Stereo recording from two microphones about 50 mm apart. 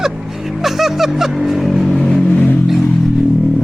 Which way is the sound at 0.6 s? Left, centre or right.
Centre.